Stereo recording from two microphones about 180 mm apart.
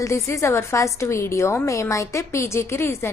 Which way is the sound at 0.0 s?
15° left (ahead or behind).